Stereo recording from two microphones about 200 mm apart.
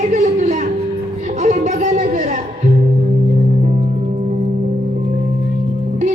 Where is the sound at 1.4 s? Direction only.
35° right (ahead or behind).